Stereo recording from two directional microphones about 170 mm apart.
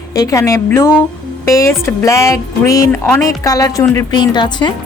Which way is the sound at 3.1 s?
20° left (ahead or behind).